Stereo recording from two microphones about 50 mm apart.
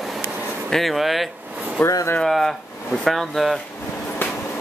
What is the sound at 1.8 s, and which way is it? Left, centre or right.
Speech, centre.